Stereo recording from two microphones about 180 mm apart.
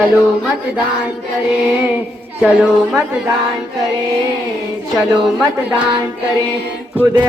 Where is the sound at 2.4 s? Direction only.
5° right (ahead or behind).